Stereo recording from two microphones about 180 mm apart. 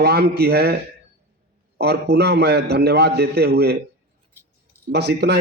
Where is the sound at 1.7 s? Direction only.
65° right (ahead or behind).